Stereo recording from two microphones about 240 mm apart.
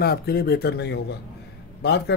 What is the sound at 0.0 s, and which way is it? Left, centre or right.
A man's voice, left.